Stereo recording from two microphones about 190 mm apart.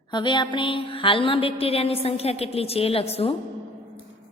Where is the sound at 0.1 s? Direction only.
25° left (ahead or behind).